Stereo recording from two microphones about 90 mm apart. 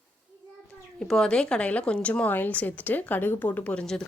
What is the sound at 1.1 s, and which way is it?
A woman's voice, 10° left (ahead or behind).